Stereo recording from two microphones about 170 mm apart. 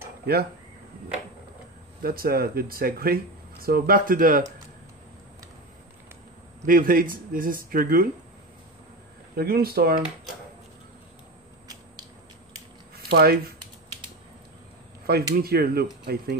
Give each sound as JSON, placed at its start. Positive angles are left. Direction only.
{"t": 0.3, "sound": "speech", "side_deg": -65}
{"t": 2.0, "sound": "speech", "side_deg": -60}
{"t": 6.6, "sound": "speech", "side_deg": -55}
{"t": 9.4, "sound": "speech", "side_deg": -65}
{"t": 12.9, "sound": "speech", "side_deg": -65}
{"t": 15.0, "sound": "speech", "side_deg": -65}